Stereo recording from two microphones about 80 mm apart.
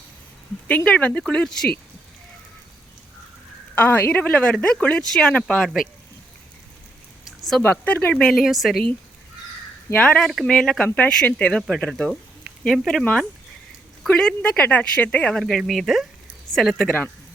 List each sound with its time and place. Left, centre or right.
0.9 s speech: centre
3.8 s speech: left; by 5.8 s centre
7.3 s a sound: centre
7.6 s speech: left
8.1 s speech: centre
10.0 s speech: centre
10.8 s speech: left; by 13.1 s centre
14.1 s speech: centre